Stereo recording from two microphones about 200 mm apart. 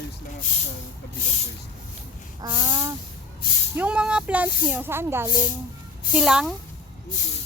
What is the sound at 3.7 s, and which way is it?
Speech, 5° right (ahead or behind).